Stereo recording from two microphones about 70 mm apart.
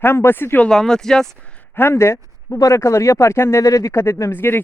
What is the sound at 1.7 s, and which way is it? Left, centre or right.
Speech, left.